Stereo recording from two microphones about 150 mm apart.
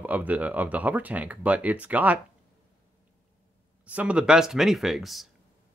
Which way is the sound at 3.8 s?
10° right (ahead or behind).